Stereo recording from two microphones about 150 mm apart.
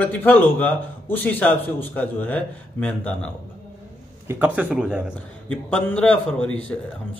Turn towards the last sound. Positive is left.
turn(degrees=5)  # may be behind; listen again after turning